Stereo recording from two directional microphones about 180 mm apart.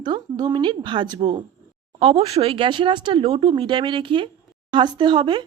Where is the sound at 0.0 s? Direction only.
25° right (ahead or behind).